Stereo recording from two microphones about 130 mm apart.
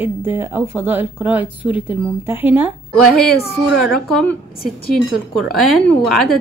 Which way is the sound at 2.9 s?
5° left (ahead or behind).